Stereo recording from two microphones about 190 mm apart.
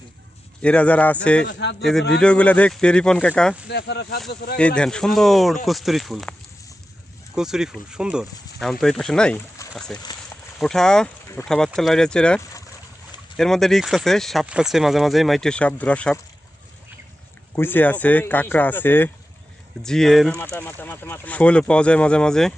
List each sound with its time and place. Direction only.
0.6 s speech: 5° left (ahead or behind)
3.7 s speech: 60° left (ahead or behind)
4.5 s speech: 5° left (ahead or behind)
7.3 s speech: 5° right (ahead or behind)
17.5 s speech: 10° left (ahead or behind)